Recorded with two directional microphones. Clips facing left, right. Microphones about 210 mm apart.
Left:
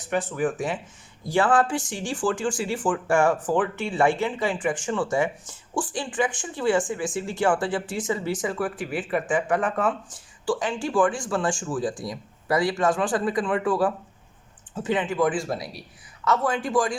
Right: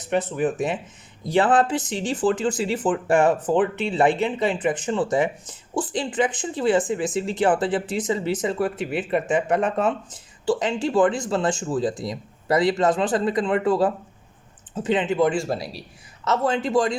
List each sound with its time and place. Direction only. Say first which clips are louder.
0.0 s speech: right 3 dB; 20° right (ahead or behind)